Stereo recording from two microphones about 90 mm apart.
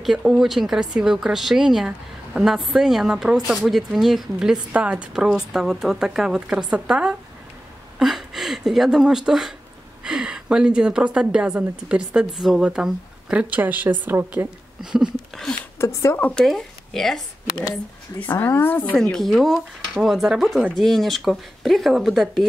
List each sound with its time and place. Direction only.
0.0 s speech: 5° right (ahead or behind)
8.0 s a sound: 5° right (ahead or behind)
10.0 s speech: 5° right (ahead or behind); by 14.5 s 25° right (ahead or behind)
14.8 s speech: 5° right (ahead or behind)
15.8 s speech: 30° left (ahead or behind)
16.2 s speech: 15° left (ahead or behind)
16.4 s speech: centre (ahead or behind)
18.2 s speech: 20° left (ahead or behind)
19.1 s speech: centre (ahead or behind)